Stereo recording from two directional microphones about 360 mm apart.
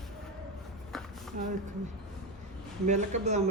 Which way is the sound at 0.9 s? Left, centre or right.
Centre.